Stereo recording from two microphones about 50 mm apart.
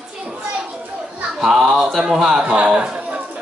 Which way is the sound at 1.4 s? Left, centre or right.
Centre.